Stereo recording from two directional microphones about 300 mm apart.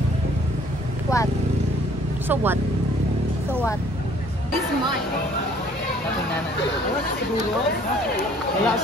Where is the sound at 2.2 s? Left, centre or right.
Centre.